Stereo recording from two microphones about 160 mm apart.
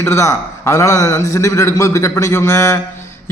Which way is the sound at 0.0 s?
15° left (ahead or behind).